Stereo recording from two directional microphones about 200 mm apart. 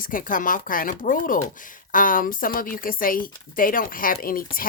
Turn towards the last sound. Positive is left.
turn(degrees=45)  # may be behind; listen again after turning